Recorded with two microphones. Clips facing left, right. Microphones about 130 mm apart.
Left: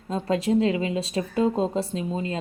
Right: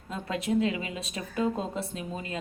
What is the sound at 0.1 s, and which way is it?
Speech, 35° left (ahead or behind).